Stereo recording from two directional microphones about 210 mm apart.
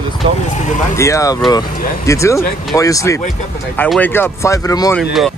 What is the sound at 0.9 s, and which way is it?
Speech, 15° left (ahead or behind).